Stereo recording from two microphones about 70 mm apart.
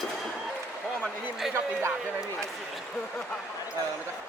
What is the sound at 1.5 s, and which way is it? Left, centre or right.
Speech, right.